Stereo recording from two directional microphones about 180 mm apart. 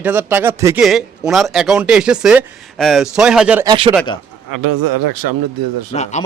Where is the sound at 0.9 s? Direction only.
Centre (ahead or behind).